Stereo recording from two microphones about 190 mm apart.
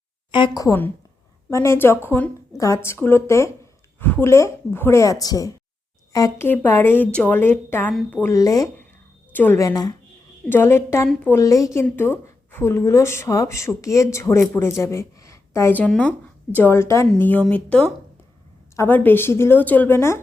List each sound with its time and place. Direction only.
0.3 s a woman's voice: 25° left (ahead or behind)